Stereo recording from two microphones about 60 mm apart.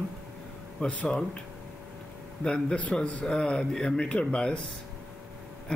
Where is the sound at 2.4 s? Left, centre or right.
Centre.